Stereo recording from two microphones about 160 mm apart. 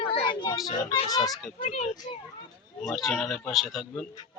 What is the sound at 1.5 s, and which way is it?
Speech, 45° left (ahead or behind).